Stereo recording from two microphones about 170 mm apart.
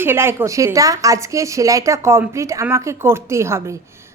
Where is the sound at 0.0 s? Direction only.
15° right (ahead or behind).